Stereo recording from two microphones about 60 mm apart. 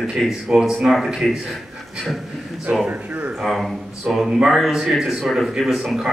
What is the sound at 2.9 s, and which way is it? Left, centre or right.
Speech, right.